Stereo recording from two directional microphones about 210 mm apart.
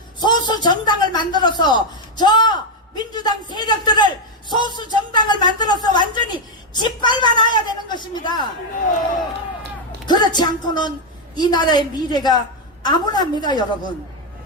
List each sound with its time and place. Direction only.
0.2 s a man's voice: 20° left (ahead or behind)
10.1 s a woman's voice: 20° left (ahead or behind)